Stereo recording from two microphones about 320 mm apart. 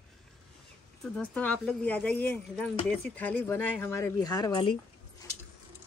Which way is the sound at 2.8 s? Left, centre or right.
Centre.